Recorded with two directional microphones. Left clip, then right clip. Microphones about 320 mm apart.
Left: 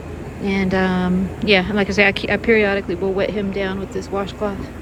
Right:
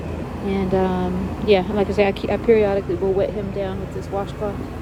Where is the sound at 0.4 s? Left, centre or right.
Left.